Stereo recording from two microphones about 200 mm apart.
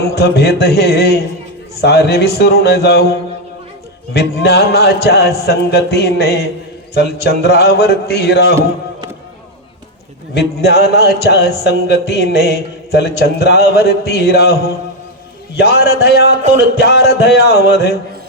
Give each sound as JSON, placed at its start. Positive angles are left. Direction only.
{"t": 0.0, "sound": "music", "side_deg": 55}
{"t": 10.3, "sound": "music", "side_deg": 55}